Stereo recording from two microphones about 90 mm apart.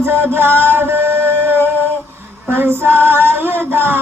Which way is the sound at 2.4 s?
25° right (ahead or behind).